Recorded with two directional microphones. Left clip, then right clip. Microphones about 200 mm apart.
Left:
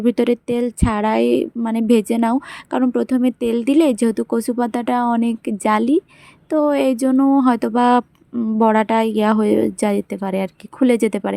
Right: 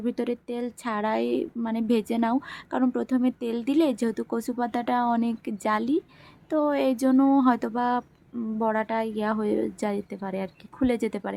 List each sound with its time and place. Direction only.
0.0 s a woman's voice: 35° left (ahead or behind)